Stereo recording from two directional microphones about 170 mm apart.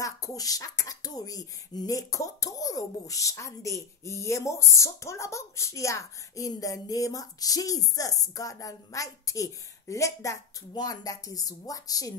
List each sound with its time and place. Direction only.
0.0 s speech: 20° left (ahead or behind)